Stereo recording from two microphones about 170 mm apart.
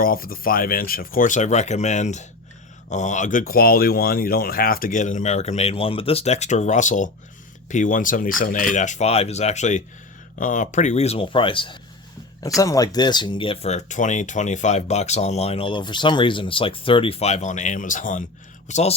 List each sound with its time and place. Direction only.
0.0 s speech: 60° left (ahead or behind); by 11.8 s 30° left (ahead or behind)
12.5 s speech: 20° left (ahead or behind); by 18.3 s 50° left (ahead or behind)
18.7 s speech: 40° left (ahead or behind)